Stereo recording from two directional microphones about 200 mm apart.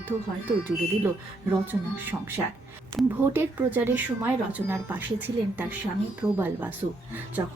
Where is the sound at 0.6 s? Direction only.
10° right (ahead or behind).